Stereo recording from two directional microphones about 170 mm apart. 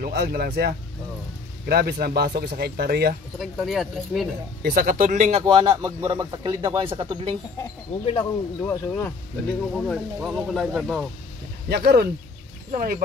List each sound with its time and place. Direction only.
0.0 s speech: 65° right (ahead or behind)
3.3 s speech: centre (ahead or behind)
4.6 s speech: 55° right (ahead or behind)
5.4 s a man's voice: 25° right (ahead or behind)
8.0 s speech: 35° left (ahead or behind)
8.6 s speech: 15° left (ahead or behind)
9.8 s speech: centre (ahead or behind)
11.7 s speech: 70° right (ahead or behind)
12.7 s speech: 55° right (ahead or behind)